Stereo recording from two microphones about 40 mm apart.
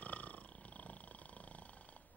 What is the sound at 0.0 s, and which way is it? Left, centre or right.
Purr, left.